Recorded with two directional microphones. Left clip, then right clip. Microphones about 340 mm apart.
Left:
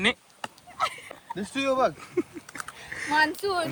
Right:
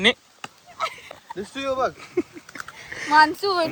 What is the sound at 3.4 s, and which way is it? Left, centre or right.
Speech, right.